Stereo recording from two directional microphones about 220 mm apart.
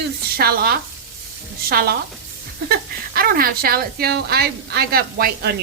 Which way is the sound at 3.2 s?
45° right (ahead or behind).